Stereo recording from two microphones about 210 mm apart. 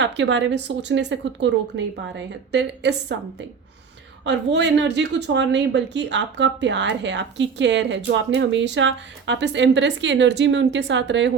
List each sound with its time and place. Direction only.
0.0 s speech: 60° right (ahead or behind)
4.3 s speech: 55° right (ahead or behind)